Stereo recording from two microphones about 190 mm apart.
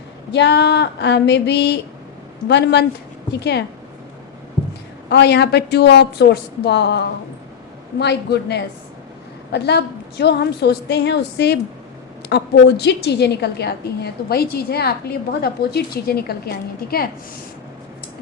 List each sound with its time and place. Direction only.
0.3 s a woman's voice: 65° left (ahead or behind)
5.0 s a woman's voice: 60° left (ahead or behind)